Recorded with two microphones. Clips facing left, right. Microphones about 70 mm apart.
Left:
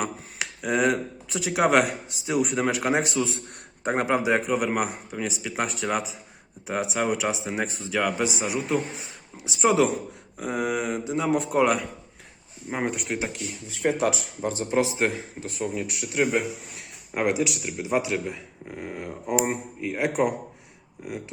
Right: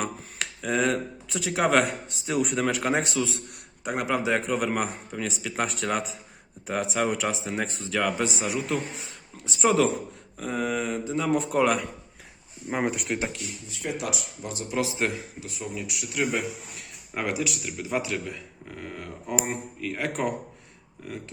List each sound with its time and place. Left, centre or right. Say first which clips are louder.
0.0 s a sound: left 1 dB; centre
1.8 s speech: left 2 dB; centre
3.2 s speech: left 1 dB; left
3.5 s a sound: left 4 dB; left
4.0 s speech: left 2 dB; left
4.4 s speech: left 2 dB; centre
14.0 s speech: left 8 dB; left
15.4 s speech: left 6 dB; left; by 20.3 s centre